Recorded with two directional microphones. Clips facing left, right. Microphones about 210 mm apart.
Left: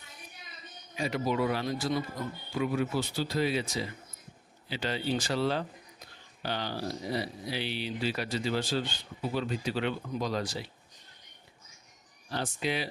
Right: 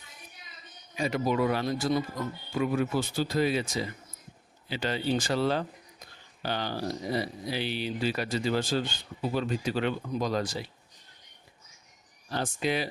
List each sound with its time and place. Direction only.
0.9 s speech: 50° right (ahead or behind)
4.7 s speech: 50° right (ahead or behind)
12.3 s speech: 45° right (ahead or behind)